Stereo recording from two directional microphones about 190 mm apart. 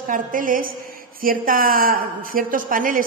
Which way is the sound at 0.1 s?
45° right (ahead or behind).